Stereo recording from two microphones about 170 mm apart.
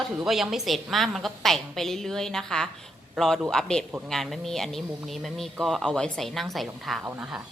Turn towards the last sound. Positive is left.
turn(degrees=-5)  # may be behind; listen again after turning